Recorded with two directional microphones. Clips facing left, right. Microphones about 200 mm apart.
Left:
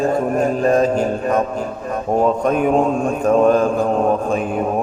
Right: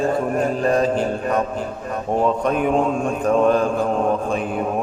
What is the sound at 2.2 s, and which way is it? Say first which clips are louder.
Mantra: left 3 dB; 45° left (ahead or behind).